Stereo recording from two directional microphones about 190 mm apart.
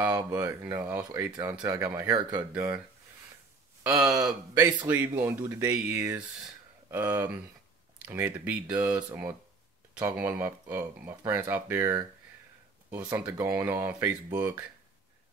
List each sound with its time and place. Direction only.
0.0 s speech: 20° right (ahead or behind)
4.2 s speech: 10° right (ahead or behind)
13.1 s speech: 5° right (ahead or behind)